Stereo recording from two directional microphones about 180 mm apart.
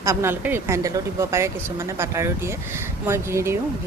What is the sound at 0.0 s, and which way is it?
A woman's voice, 15° right (ahead or behind).